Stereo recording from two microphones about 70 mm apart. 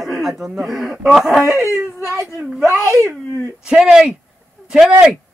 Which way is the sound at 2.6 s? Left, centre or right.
Right.